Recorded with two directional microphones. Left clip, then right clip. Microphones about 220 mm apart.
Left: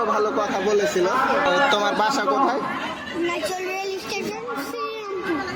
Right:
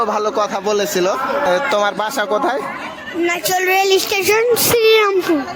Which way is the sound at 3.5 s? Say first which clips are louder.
Right 13 dB; 45° right (ahead or behind).